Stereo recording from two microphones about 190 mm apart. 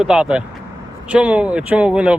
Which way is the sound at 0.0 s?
5° right (ahead or behind).